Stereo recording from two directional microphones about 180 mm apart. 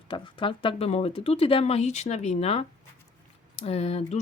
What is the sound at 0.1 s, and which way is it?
Speech, 30° left (ahead or behind).